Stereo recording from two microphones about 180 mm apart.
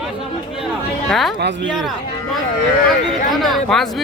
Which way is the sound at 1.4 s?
75° right (ahead or behind).